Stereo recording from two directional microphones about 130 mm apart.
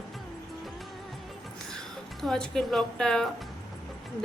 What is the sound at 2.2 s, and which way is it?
A woman's voice, 5° left (ahead or behind).